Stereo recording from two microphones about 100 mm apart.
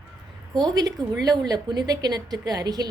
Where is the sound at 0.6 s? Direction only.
40° right (ahead or behind).